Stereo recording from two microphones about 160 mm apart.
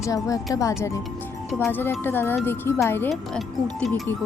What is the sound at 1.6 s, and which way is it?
Speech, 10° left (ahead or behind).